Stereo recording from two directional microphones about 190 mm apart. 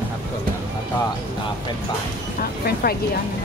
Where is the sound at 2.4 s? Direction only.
55° left (ahead or behind).